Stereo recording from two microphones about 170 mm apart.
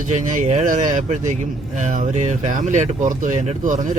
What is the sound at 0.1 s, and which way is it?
Speech, 45° right (ahead or behind).